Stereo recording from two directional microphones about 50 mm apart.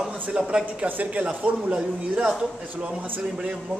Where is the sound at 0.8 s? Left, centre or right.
Right.